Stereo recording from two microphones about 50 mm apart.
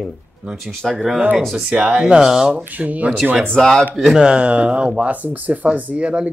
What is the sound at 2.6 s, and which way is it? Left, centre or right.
Speech, right.